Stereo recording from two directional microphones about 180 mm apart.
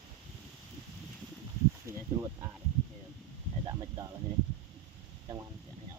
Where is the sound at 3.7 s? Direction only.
20° right (ahead or behind).